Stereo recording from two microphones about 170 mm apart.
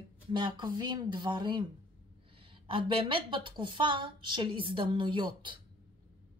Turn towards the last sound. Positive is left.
turn(degrees=-30)  # may be behind; listen again after turning